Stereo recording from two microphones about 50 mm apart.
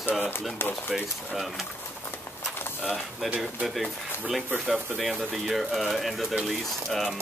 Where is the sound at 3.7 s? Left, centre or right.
Centre.